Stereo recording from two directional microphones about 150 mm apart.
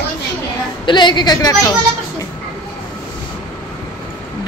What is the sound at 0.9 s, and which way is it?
Speech, 30° left (ahead or behind).